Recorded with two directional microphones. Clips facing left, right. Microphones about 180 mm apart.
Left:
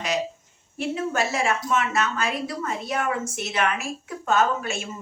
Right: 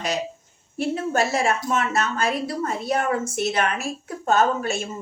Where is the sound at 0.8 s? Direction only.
35° right (ahead or behind).